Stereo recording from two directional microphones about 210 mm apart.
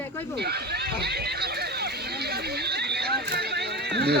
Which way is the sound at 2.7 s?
50° right (ahead or behind).